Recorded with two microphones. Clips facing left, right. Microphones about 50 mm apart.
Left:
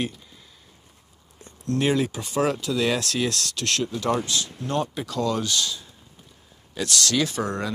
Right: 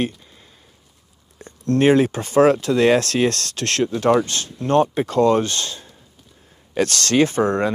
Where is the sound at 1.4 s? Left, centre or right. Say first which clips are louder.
Right 8 dB; right.